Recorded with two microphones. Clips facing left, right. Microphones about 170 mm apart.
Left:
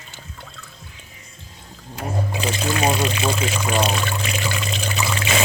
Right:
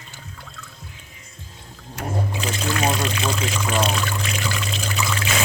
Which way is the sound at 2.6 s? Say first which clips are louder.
Left 1 dB; 20° left (ahead or behind).